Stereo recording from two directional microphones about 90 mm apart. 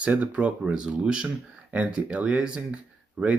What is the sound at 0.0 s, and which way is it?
Speech, 15° right (ahead or behind).